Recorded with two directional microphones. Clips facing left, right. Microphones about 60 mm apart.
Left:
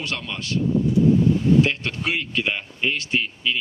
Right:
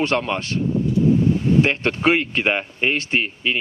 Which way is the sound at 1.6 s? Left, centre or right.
Right.